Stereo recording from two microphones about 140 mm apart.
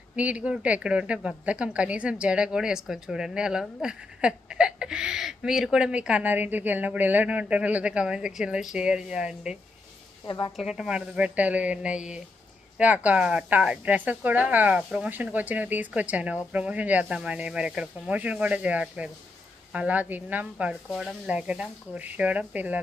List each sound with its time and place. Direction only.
0.2 s a woman's voice: 10° right (ahead or behind)
10.2 s a woman's voice: 35° left (ahead or behind)
10.6 s a woman's voice: 5° right (ahead or behind)